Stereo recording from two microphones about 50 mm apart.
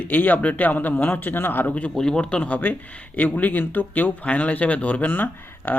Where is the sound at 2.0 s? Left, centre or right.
Centre; by 5.7 s left.